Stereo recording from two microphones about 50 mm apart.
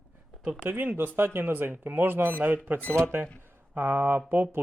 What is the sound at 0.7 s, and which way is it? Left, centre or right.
Speech, right.